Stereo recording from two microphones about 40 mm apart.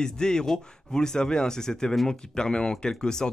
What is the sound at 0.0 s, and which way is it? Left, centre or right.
A man's voice, centre.